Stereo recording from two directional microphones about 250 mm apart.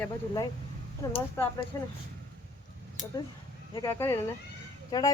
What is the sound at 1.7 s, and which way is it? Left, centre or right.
Speech, centre.